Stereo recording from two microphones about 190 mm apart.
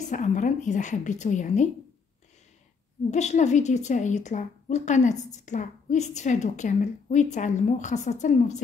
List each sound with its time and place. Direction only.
0.1 s a woman's voice: 40° left (ahead or behind)
3.1 s a woman's voice: 35° left (ahead or behind)